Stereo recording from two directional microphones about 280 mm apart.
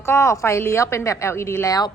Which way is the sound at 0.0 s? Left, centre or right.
Centre.